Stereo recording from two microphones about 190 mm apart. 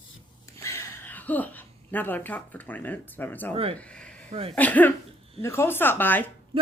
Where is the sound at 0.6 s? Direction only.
15° left (ahead or behind).